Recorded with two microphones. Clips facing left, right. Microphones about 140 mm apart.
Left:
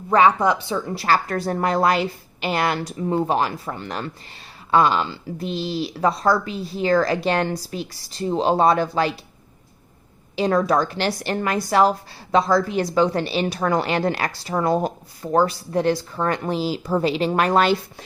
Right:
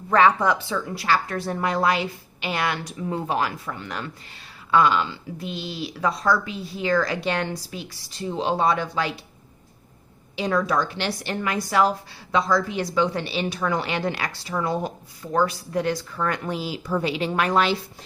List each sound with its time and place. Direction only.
0.1 s speech: 15° left (ahead or behind)
0.9 s a woman's voice: 40° left (ahead or behind)
10.3 s a woman's voice: 40° left (ahead or behind)